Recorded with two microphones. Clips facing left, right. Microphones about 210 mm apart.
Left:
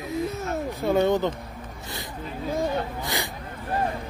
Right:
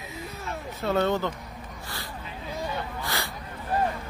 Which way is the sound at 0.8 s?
15° left (ahead or behind).